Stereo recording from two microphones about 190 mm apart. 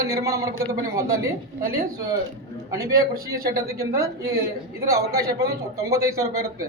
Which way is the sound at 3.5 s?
15° right (ahead or behind).